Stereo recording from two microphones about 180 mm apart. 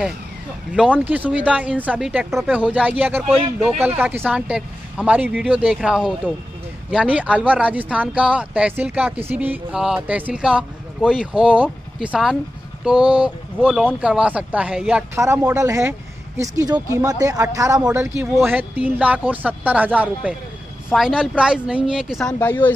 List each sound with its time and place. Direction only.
0.7 s speech: 10° right (ahead or behind)
22.4 s speech: 10° left (ahead or behind)